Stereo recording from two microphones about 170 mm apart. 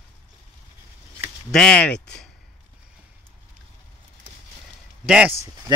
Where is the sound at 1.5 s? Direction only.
5° left (ahead or behind).